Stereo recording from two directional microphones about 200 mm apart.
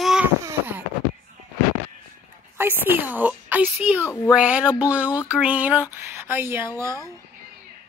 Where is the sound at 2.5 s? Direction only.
10° right (ahead or behind).